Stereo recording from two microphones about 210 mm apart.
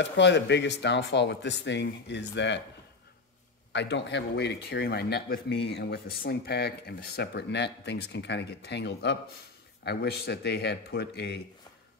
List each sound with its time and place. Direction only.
0.0 s speech: 55° left (ahead or behind)
3.7 s speech: 55° left (ahead or behind)